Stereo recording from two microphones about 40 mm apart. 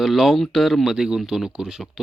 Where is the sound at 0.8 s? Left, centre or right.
Centre.